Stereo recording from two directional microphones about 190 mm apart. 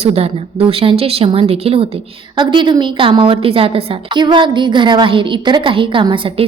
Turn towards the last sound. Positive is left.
turn(degrees=-25)  # may be behind; listen again after turning